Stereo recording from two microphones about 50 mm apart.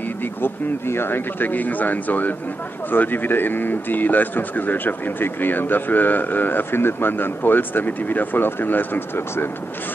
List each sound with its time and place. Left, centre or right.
0.2 s a man's voice: left